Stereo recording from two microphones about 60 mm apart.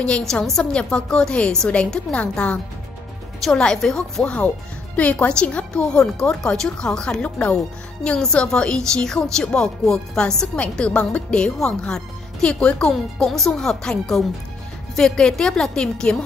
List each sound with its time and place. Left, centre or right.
0.2 s speech: centre
3.4 s speech: centre
12.9 s speech: centre